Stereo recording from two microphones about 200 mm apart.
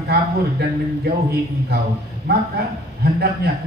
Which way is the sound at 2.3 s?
55° right (ahead or behind).